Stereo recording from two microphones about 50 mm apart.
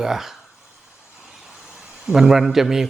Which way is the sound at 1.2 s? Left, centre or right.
Centre.